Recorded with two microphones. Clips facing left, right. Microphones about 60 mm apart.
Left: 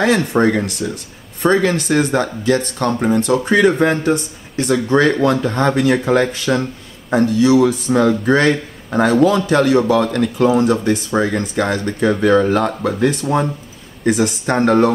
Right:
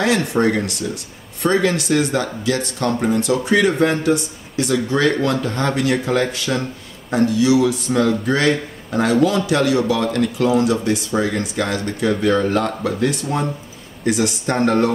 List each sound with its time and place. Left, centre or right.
0.0 s speech: left
4.1 s speech: left
12.3 s speech: left